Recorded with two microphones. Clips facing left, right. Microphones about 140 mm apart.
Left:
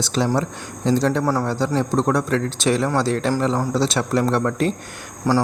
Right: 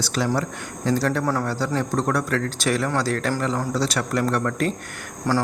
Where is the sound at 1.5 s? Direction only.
20° left (ahead or behind).